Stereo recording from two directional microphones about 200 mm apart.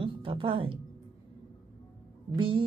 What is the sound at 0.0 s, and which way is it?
Music, 25° right (ahead or behind).